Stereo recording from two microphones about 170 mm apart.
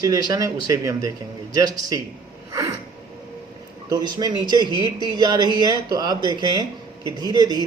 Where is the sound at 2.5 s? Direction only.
20° right (ahead or behind).